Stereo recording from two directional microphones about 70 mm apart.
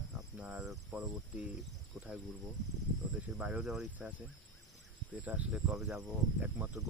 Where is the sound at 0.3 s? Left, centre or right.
Centre.